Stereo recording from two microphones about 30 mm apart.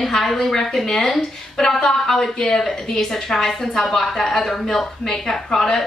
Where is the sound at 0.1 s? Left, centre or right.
Centre.